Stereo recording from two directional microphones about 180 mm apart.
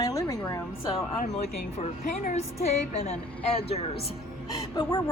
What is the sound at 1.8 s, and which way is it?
Speech, 40° left (ahead or behind).